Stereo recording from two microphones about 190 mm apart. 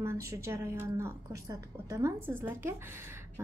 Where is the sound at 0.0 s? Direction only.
15° right (ahead or behind).